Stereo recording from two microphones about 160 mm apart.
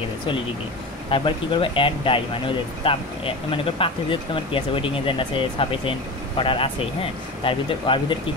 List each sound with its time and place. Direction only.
1.1 s speech: 30° left (ahead or behind)